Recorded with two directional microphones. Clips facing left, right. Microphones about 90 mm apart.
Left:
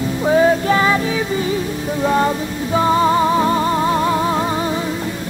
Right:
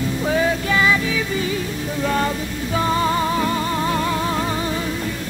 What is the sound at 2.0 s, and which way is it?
Music, 25° left (ahead or behind).